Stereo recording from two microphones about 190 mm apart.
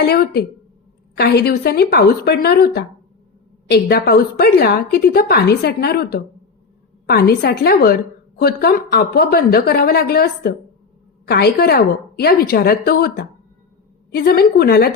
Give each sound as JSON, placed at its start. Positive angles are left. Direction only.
{"t": 1.1, "sound": "a woman's voice", "side_deg": 60}